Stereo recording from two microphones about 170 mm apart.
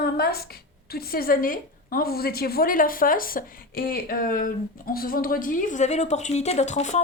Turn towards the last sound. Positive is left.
turn(degrees=45)  # may be behind; listen again after turning